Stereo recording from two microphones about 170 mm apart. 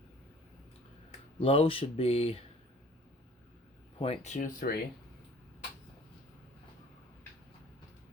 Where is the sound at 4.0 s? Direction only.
40° left (ahead or behind).